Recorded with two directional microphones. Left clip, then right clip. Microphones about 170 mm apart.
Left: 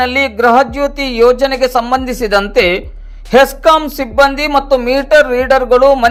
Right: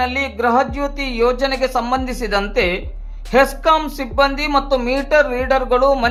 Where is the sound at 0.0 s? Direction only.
35° left (ahead or behind).